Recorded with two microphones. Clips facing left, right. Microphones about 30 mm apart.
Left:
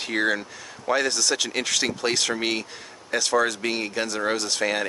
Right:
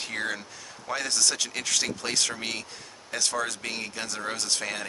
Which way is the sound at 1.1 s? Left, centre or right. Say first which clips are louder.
Left 3 dB; centre.